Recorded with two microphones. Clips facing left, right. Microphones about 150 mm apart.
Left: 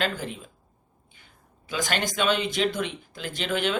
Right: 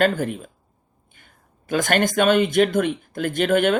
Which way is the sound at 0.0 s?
50° right (ahead or behind).